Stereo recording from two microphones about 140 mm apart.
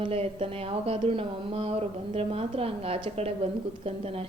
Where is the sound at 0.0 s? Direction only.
45° right (ahead or behind).